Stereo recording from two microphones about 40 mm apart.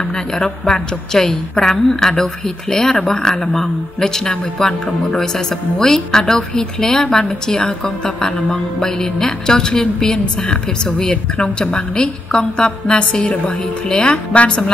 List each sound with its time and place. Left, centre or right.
0.1 s a woman's voice: centre